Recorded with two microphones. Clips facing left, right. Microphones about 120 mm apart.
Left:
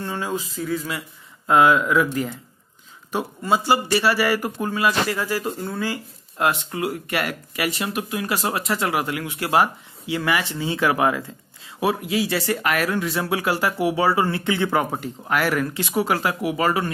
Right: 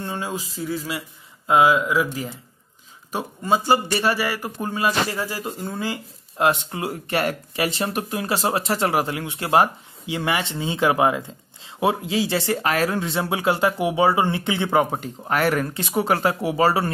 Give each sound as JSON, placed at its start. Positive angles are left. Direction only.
{"t": 0.0, "sound": "a sound", "side_deg": -15}
{"t": 0.4, "sound": "speech", "side_deg": -30}
{"t": 3.1, "sound": "speech", "side_deg": -15}
{"t": 5.6, "sound": "speech", "side_deg": -15}